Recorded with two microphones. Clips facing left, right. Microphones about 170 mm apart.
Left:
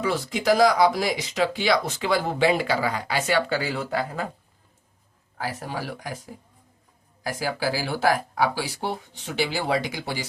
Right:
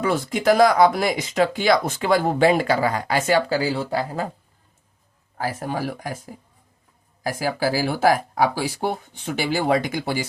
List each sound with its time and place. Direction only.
0.0 s speech: 50° right (ahead or behind); by 4.3 s 35° right (ahead or behind)
5.4 s speech: 50° right (ahead or behind)
7.3 s speech: 45° right (ahead or behind)